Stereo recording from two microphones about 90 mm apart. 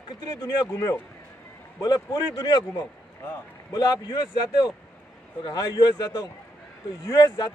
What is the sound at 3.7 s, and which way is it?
Speech, 45° left (ahead or behind).